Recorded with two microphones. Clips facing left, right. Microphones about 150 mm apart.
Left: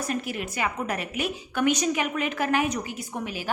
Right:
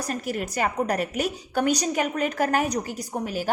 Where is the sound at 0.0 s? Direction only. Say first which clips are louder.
Right 1 dB; 40° right (ahead or behind).